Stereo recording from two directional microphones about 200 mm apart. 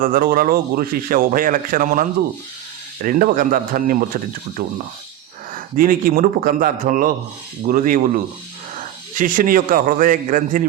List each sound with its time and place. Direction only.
0.0 s a man's voice: 45° right (ahead or behind)